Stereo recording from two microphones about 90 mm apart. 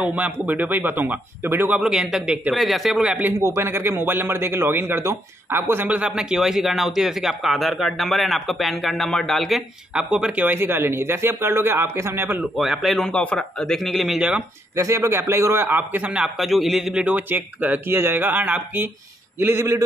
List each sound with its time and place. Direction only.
0.0 s a man's voice: 15° right (ahead or behind)
1.8 s speech: 10° right (ahead or behind)
2.5 s a man's voice: centre (ahead or behind)
3.3 s a man's voice: 30° right (ahead or behind); by 10.4 s 10° right (ahead or behind)
10.4 s a man's voice: 20° right (ahead or behind)
12.5 s a man's voice: 5° right (ahead or behind)
13.0 s a man's voice: 10° left (ahead or behind); by 14.4 s 10° right (ahead or behind)
14.8 s a man's voice: 30° right (ahead or behind); by 17.0 s 5° right (ahead or behind)
17.0 s a man's voice: 20° right (ahead or behind)
19.4 s a man's voice: 30° right (ahead or behind)